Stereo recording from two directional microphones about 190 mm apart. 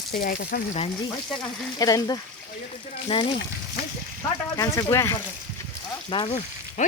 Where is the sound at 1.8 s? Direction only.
20° left (ahead or behind).